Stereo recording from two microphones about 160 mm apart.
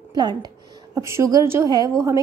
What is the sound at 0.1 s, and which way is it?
A woman's voice, 25° right (ahead or behind).